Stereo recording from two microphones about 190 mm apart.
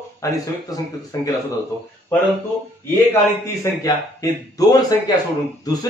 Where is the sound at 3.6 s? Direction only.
15° left (ahead or behind).